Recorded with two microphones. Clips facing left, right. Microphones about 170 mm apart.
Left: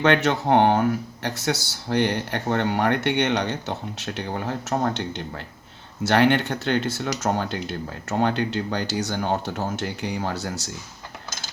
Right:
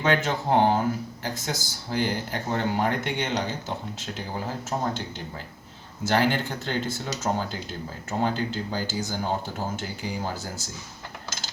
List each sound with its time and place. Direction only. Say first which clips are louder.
0.0 s speech: left 4 dB; 70° left (ahead or behind)